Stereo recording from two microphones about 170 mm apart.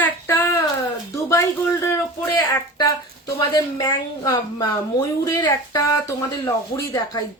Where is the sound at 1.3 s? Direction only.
15° left (ahead or behind).